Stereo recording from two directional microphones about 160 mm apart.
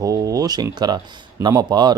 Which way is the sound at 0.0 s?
20° right (ahead or behind).